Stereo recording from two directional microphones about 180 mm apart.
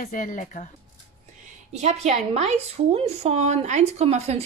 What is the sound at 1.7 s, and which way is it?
A woman's voice, 35° right (ahead or behind).